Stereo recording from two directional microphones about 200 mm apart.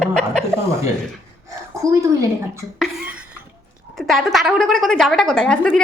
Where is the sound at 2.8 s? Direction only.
5° right (ahead or behind).